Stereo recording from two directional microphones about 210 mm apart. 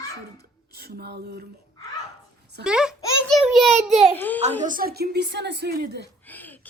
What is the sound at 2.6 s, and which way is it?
Speech, 5° right (ahead or behind).